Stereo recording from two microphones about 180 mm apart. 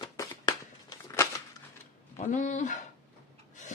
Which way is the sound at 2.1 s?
40° left (ahead or behind).